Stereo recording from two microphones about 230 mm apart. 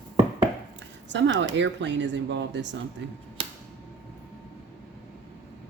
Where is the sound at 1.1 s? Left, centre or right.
Right.